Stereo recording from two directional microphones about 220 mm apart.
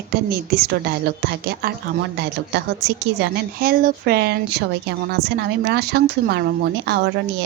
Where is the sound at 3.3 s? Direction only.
45° right (ahead or behind).